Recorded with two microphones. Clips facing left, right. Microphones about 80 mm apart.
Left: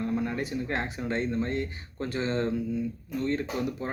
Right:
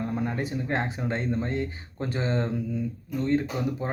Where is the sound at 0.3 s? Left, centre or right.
Right.